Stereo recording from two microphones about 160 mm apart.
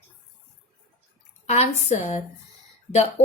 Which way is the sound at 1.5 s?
45° left (ahead or behind).